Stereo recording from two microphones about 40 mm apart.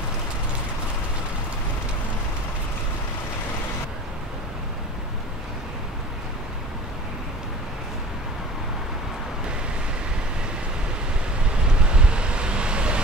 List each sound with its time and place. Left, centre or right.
11.8 s wind: right